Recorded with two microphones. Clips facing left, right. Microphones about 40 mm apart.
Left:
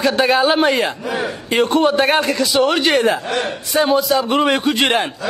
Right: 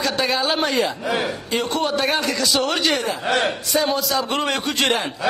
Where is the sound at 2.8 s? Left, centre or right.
Left.